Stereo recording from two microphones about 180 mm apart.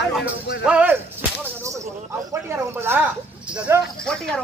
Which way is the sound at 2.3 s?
15° right (ahead or behind).